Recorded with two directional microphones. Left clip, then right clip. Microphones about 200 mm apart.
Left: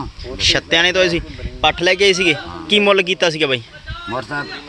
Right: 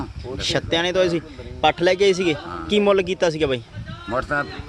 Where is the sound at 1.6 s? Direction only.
15° right (ahead or behind).